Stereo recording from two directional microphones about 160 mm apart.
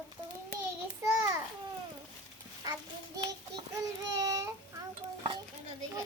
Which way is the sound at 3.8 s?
20° right (ahead or behind).